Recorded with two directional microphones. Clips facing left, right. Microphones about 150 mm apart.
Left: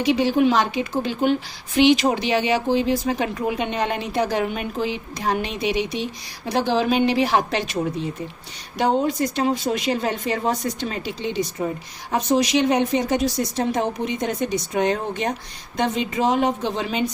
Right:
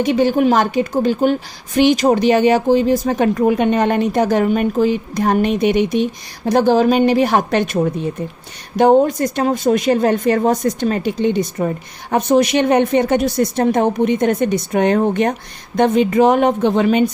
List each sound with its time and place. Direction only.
0.0 s a woman's voice: 50° right (ahead or behind)